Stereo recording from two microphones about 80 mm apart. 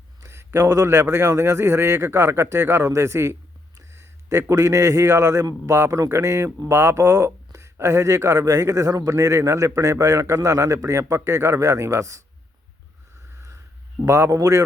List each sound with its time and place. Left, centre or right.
0.2 s a sound: right
0.7 s a man's voice: right
14.0 s speech: right